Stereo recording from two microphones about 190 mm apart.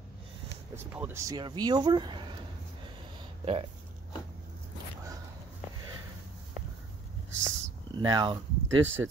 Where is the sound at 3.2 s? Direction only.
30° right (ahead or behind).